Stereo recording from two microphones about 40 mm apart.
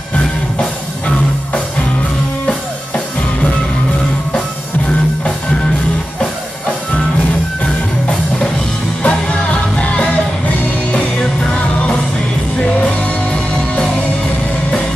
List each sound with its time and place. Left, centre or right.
0.6 s music: left
9.0 s music: left